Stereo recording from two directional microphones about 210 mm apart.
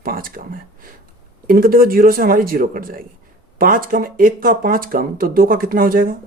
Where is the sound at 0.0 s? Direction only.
40° right (ahead or behind).